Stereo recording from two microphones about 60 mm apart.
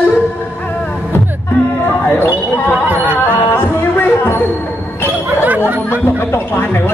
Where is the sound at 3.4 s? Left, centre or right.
Left.